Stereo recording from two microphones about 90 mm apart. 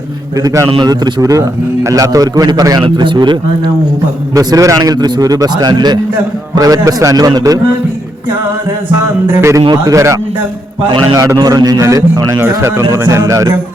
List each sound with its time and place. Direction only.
0.4 s a man's voice: 35° right (ahead or behind)
0.8 s a man's voice: 50° right (ahead or behind)
2.8 s speech: 60° right (ahead or behind)
4.4 s a man's voice: 40° right (ahead or behind)
6.6 s a man's voice: 40° right (ahead or behind)
9.2 s a man's voice: 30° right (ahead or behind)
11.3 s a man's voice: 45° right (ahead or behind)
12.4 s a man's voice: 30° right (ahead or behind)